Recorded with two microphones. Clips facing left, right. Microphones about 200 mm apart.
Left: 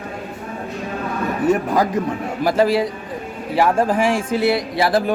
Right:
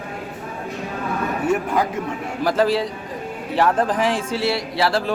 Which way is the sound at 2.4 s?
10° left (ahead or behind).